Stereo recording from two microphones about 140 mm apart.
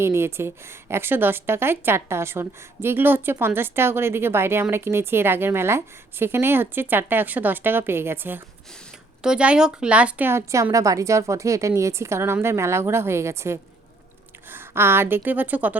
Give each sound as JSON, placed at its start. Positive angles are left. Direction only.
{"t": 0.0, "sound": "a woman's voice", "side_deg": -15}